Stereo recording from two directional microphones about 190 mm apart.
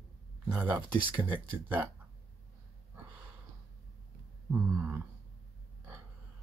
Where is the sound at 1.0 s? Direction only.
25° right (ahead or behind).